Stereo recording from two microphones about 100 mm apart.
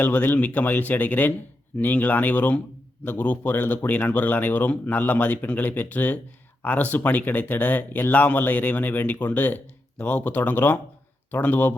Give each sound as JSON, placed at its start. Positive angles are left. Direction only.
{"t": 0.0, "sound": "a man's voice", "side_deg": 15}